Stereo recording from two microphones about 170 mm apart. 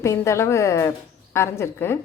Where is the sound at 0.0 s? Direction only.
15° left (ahead or behind).